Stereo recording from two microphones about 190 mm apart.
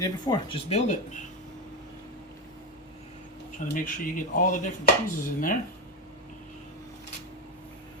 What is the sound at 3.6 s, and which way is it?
Speech, 45° left (ahead or behind).